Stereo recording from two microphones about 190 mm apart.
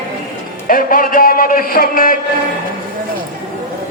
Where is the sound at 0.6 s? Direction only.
45° left (ahead or behind).